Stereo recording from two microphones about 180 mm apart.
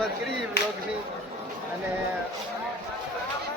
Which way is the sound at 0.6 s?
60° left (ahead or behind).